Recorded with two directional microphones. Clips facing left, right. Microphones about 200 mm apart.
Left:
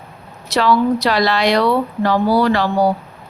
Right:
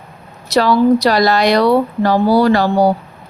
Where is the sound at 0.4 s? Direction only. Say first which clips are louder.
Right 3 dB; 40° right (ahead or behind).